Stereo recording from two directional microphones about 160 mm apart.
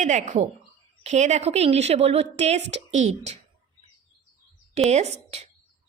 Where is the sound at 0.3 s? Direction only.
40° right (ahead or behind).